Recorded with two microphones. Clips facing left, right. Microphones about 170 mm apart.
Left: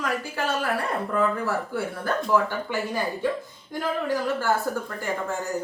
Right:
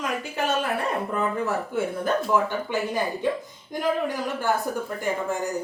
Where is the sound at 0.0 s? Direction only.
20° right (ahead or behind).